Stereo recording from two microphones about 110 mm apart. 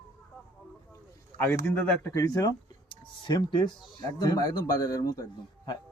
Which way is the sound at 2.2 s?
30° left (ahead or behind).